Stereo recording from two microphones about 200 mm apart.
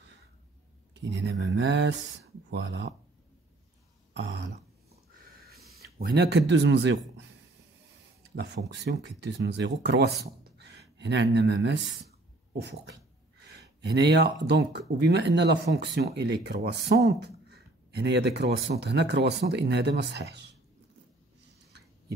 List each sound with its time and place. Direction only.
1.1 s speech: 65° right (ahead or behind)
5.2 s a sound: 50° right (ahead or behind)
5.9 s speech: 55° right (ahead or behind)
8.4 s speech: 60° right (ahead or behind)
13.4 s speech: 55° right (ahead or behind)